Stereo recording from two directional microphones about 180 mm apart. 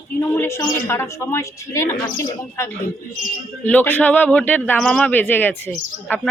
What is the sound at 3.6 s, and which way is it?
A woman's voice, 10° left (ahead or behind).